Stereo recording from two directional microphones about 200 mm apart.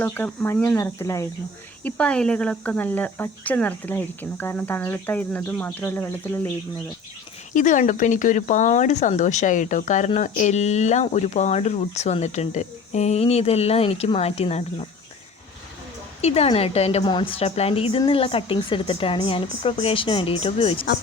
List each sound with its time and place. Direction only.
0.0 s speech: 10° left (ahead or behind)
7.5 s speech: 40° left (ahead or behind)
16.2 s a woman's voice: 30° left (ahead or behind)